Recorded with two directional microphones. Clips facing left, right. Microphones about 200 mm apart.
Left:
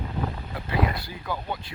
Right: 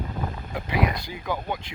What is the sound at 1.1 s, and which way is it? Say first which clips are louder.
Speech: right 2 dB; 15° right (ahead or behind).